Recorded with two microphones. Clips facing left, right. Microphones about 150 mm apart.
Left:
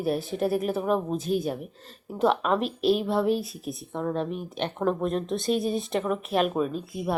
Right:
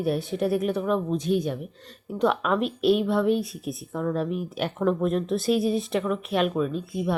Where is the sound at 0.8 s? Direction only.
40° left (ahead or behind).